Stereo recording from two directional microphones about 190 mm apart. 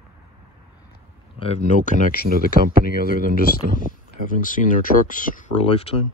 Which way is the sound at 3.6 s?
60° right (ahead or behind).